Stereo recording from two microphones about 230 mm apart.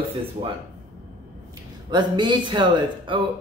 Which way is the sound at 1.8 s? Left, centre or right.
Centre.